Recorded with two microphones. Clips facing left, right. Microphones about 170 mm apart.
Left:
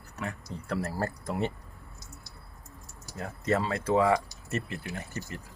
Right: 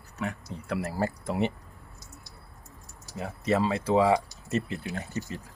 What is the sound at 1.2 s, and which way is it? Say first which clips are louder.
Speech: right 3 dB; 15° right (ahead or behind).